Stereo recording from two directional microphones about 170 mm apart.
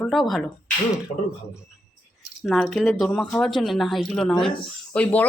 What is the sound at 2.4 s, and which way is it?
A man's voice, centre (ahead or behind).